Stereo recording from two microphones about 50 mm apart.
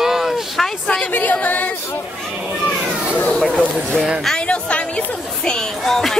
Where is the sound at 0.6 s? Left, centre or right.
Centre.